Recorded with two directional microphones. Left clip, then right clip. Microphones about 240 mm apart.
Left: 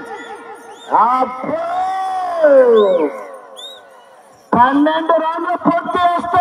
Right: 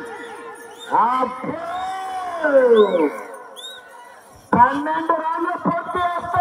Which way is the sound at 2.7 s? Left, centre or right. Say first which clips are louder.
Left 3 dB; left.